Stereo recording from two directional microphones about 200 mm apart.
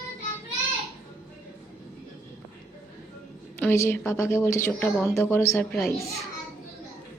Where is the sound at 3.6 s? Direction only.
10° left (ahead or behind).